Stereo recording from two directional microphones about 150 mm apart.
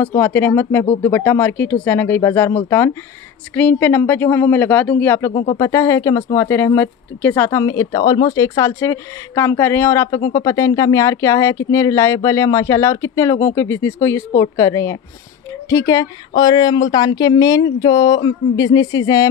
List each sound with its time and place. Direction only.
0.0 s speech: 10° left (ahead or behind)